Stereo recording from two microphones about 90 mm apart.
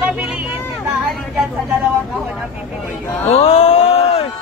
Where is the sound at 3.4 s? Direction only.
90° left.